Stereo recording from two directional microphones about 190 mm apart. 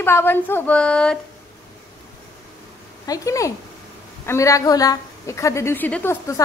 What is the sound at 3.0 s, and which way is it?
A woman's voice, 20° left (ahead or behind).